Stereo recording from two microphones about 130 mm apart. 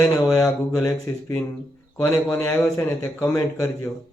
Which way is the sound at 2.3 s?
10° left (ahead or behind).